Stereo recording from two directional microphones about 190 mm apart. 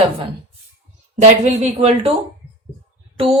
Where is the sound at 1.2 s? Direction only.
35° right (ahead or behind).